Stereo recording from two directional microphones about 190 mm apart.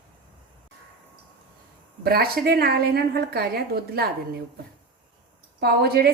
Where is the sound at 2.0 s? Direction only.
55° right (ahead or behind).